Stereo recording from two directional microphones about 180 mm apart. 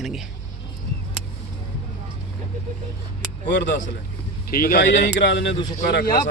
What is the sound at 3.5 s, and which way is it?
Speech, 75° left (ahead or behind).